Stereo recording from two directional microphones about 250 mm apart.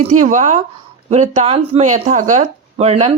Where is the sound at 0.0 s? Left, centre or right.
Right.